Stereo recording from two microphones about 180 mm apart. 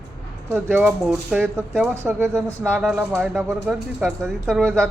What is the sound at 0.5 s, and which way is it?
Speech, 10° right (ahead or behind).